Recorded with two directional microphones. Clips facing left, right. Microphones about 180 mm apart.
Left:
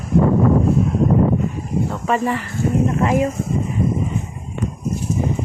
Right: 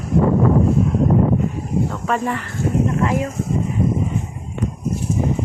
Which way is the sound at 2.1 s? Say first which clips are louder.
Left 4 dB; centre (ahead or behind).